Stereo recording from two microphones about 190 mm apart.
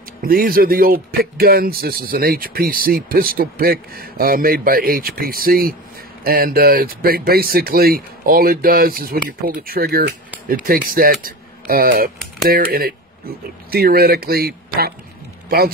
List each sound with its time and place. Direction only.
0.2 s speech: 50° right (ahead or behind)